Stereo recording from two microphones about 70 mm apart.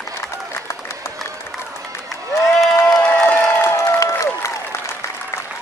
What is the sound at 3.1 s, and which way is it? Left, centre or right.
Crowd, left.